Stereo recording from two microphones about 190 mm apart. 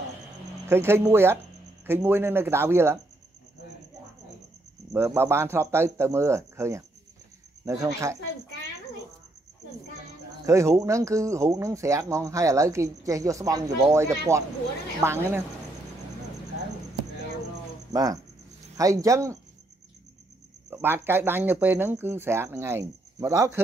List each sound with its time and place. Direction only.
0.7 s speech: 15° right (ahead or behind)
4.9 s speech: 15° right (ahead or behind)
10.4 s speech: 15° right (ahead or behind)
17.9 s speech: 20° right (ahead or behind)
20.7 s speech: 10° right (ahead or behind)